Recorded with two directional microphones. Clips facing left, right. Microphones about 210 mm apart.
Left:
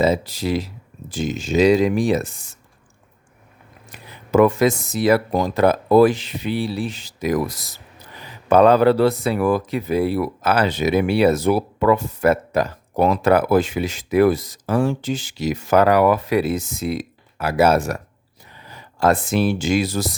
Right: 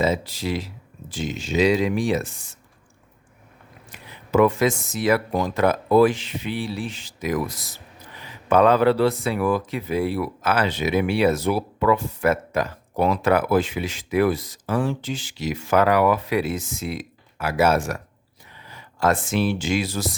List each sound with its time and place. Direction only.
0.0 s speech: 40° left (ahead or behind)
3.9 s speech: 40° left (ahead or behind)